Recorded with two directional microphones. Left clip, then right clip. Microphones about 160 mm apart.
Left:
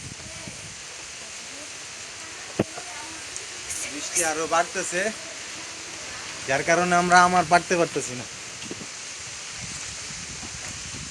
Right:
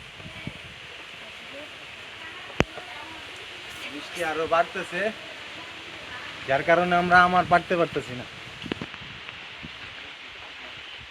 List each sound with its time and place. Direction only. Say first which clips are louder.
4.1 s speech: left 1 dB; 5° left (ahead or behind)
6.5 s speech: even; centre (ahead or behind)